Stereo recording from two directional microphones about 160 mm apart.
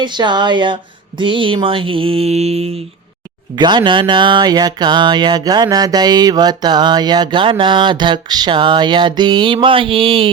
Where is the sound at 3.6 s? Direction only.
30° right (ahead or behind).